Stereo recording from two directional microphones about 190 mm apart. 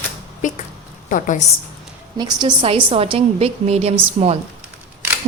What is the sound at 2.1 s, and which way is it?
A woman's voice, 20° right (ahead or behind).